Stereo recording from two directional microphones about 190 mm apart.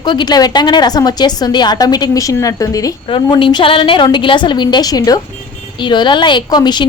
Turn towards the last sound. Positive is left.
turn(degrees=20)  # may be behind; listen again after turning